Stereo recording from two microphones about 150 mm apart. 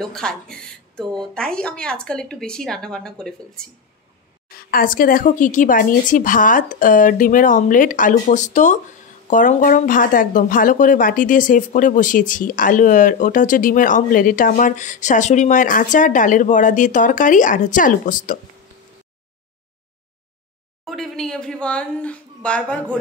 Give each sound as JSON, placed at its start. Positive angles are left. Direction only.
{"t": 0.0, "sound": "speech", "side_deg": 5}
{"t": 4.5, "sound": "speech", "side_deg": 80}
{"t": 20.8, "sound": "a sound", "side_deg": 0}